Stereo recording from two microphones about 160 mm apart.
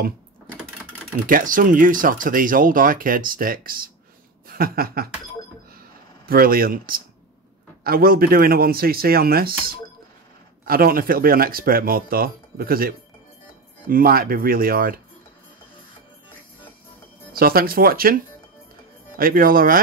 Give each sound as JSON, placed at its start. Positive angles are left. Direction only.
{"t": 1.2, "sound": "speech", "side_deg": -55}
{"t": 6.2, "sound": "speech", "side_deg": -65}
{"t": 17.3, "sound": "speech", "side_deg": -65}